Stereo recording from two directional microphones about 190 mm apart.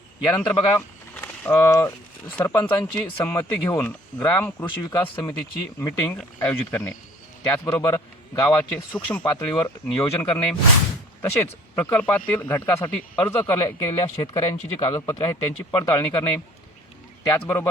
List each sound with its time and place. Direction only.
0.3 s speech: 10° left (ahead or behind)